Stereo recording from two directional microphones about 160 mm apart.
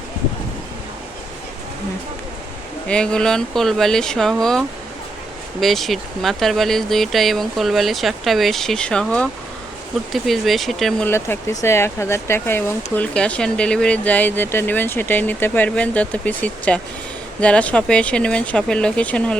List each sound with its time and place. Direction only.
2.8 s speech: 5° left (ahead or behind)
11.1 s speech: 15° left (ahead or behind)